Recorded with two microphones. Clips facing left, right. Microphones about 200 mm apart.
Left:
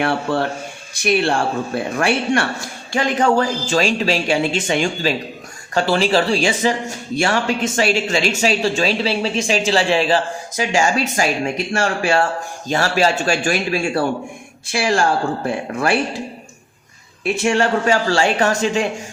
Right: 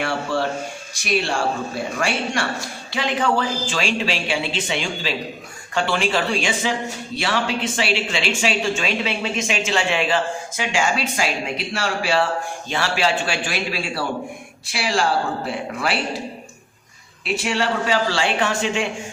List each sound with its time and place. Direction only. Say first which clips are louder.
1.0 s speech: left 4 dB; 55° left (ahead or behind)
2.9 s speech: left 5 dB; 45° left (ahead or behind)
7.2 s speech: left 5 dB; 45° left (ahead or behind)
17.3 s speech: left 4 dB; 50° left (ahead or behind)